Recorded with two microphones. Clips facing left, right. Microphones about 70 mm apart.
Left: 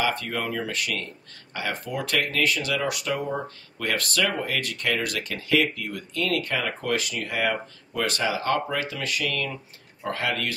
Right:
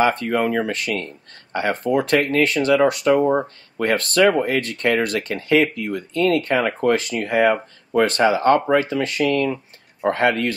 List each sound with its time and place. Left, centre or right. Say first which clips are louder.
0.0 s speech: right 8 dB; right